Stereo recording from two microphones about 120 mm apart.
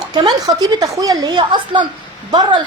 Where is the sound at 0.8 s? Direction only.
30° right (ahead or behind).